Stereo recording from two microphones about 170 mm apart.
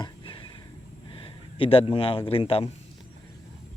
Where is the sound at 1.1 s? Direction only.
30° left (ahead or behind).